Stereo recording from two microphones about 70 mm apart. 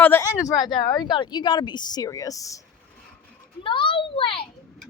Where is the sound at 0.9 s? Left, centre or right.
Left.